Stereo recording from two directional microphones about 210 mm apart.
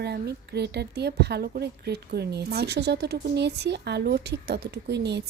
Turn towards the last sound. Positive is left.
turn(degrees=-55)  # may be behind; listen again after turning